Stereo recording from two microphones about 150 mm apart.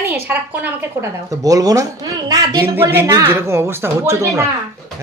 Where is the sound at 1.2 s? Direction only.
25° right (ahead or behind).